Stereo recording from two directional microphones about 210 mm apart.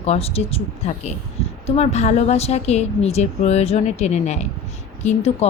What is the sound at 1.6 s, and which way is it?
A woman's voice, 30° left (ahead or behind).